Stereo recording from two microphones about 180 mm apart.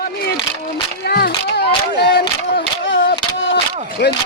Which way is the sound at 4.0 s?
65° left (ahead or behind).